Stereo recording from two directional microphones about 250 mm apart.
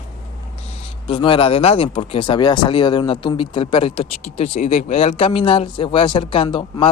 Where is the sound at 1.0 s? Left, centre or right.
Left.